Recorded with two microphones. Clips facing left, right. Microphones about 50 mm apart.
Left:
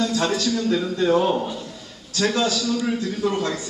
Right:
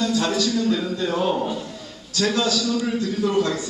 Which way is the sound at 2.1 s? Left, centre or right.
Left.